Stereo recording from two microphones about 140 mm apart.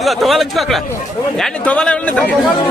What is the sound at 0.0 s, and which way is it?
Speech, centre (ahead or behind).